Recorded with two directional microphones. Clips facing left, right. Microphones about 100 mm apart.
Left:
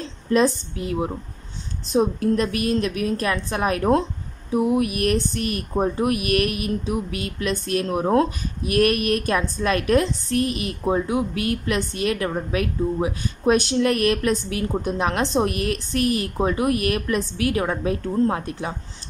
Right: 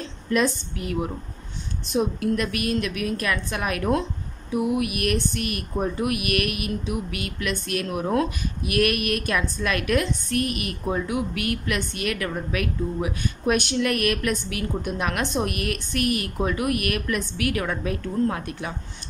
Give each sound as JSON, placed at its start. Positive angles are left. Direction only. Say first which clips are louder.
{"t": 0.0, "sound": "a woman's voice", "louder": "left 4 dB", "side_deg": 30}